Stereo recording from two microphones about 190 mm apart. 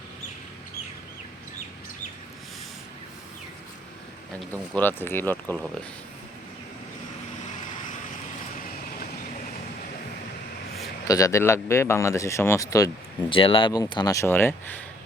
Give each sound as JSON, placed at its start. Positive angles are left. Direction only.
{"t": 4.7, "sound": "speech", "side_deg": 10}
{"t": 11.0, "sound": "speech", "side_deg": 15}
{"t": 13.3, "sound": "speech", "side_deg": 25}